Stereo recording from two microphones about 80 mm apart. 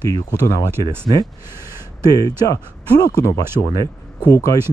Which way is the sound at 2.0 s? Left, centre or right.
Left.